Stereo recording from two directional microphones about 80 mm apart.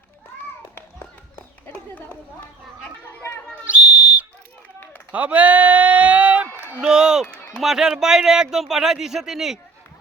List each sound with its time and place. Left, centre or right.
3.7 s whistle: centre
5.1 s a sound: centre
6.8 s run: centre
7.6 s speech: centre